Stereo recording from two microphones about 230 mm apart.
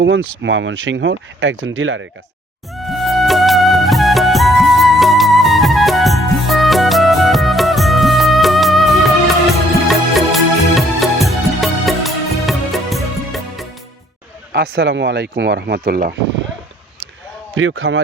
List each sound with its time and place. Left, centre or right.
0.0 s speech: right
2.7 s music: centre
14.5 s speech: right
17.5 s speech: right